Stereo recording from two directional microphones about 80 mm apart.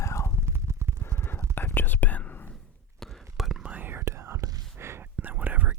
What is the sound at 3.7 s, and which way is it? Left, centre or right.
Whispering, right.